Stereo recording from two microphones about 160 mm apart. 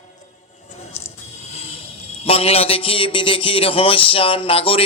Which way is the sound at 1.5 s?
35° left (ahead or behind).